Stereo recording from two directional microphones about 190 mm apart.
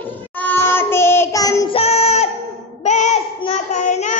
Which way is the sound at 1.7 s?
35° left (ahead or behind).